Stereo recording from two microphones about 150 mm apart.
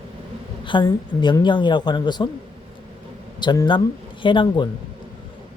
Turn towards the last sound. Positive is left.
turn(degrees=30)  # may be behind; listen again after turning